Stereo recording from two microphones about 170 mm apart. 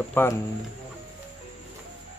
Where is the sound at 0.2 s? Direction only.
10° left (ahead or behind).